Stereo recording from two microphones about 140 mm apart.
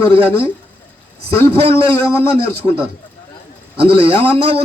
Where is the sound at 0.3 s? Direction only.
15° left (ahead or behind).